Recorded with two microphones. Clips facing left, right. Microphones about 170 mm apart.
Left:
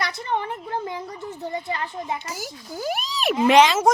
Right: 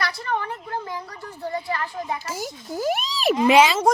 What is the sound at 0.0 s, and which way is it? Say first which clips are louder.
Speech: even; 20° left (ahead or behind).